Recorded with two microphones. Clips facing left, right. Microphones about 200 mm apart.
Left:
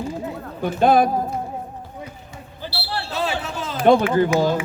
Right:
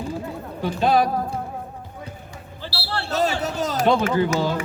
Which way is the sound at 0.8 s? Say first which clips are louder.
Left 3 dB; 50° left (ahead or behind).